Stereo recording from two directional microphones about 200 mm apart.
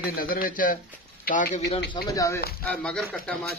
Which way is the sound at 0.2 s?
45° left (ahead or behind).